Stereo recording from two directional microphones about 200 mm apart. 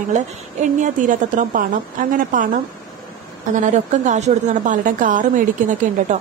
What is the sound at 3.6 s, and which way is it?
A woman's voice, 35° right (ahead or behind).